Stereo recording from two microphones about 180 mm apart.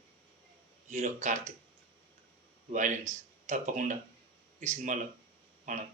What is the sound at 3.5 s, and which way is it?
Speech, 45° right (ahead or behind).